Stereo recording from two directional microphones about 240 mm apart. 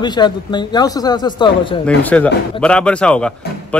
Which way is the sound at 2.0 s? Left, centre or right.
Centre.